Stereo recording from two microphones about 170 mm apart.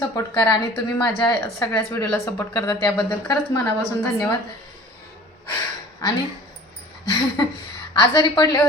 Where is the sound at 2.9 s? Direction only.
10° left (ahead or behind).